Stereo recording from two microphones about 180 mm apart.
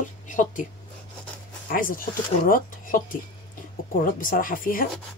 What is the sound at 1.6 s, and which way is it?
Speech, 50° left (ahead or behind).